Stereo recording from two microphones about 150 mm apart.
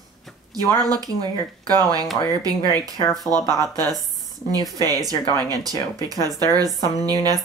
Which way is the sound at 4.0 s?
25° right (ahead or behind).